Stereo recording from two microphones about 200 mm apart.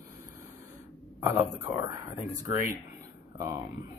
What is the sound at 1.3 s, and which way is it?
Speech, 15° right (ahead or behind).